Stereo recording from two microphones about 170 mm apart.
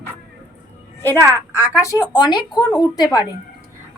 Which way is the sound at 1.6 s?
15° left (ahead or behind).